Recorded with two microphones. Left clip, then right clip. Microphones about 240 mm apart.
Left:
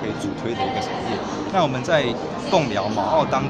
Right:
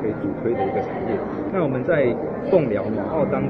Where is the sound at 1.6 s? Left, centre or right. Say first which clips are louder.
Even; left.